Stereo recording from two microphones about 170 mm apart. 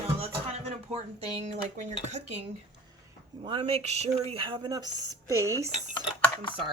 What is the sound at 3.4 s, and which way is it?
Speech, 30° right (ahead or behind).